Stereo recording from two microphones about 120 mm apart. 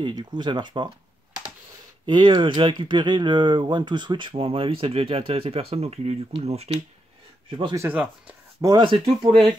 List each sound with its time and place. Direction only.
0.0 s speech: 40° right (ahead or behind)
2.0 s speech: 40° right (ahead or behind); by 6.8 s 60° right (ahead or behind)
7.4 s speech: 45° right (ahead or behind)
7.7 s speech: 20° right (ahead or behind)
8.5 s speech: 30° right (ahead or behind)
8.8 s speech: 45° right (ahead or behind)